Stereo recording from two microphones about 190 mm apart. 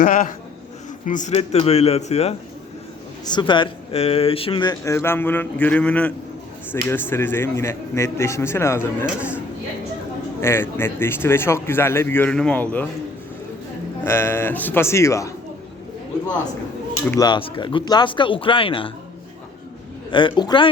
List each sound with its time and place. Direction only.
0.0 s a man's voice: 45° left (ahead or behind)
3.2 s speech: 25° left (ahead or behind)
10.4 s speech: 10° left (ahead or behind)
14.0 s speech: 15° left (ahead or behind)
17.1 s speech: 20° left (ahead or behind)
20.1 s speech: 25° left (ahead or behind)